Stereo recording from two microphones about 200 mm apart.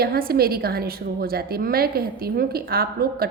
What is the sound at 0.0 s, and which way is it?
A woman's voice, 50° right (ahead or behind).